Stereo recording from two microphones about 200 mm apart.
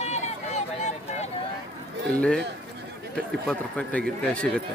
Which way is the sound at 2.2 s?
5° left (ahead or behind).